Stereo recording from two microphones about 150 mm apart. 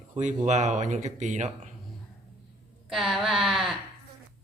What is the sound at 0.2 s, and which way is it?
Speech, 55° right (ahead or behind).